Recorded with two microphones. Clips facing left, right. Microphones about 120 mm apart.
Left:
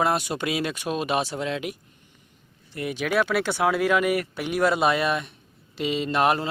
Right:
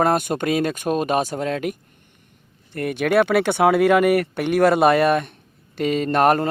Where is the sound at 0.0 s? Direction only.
50° right (ahead or behind).